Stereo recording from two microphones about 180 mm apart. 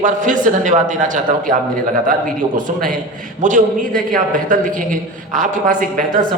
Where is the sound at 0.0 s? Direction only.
45° right (ahead or behind).